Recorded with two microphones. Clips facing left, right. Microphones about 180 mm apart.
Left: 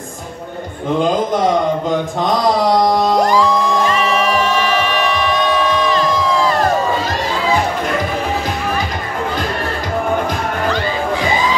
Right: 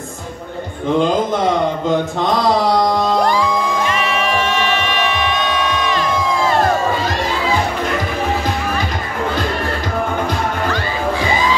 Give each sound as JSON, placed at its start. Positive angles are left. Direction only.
{"t": 3.2, "sound": "music", "side_deg": 40}